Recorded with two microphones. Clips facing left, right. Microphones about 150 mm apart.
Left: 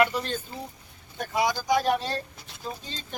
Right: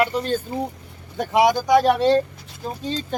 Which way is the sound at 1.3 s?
75° right (ahead or behind).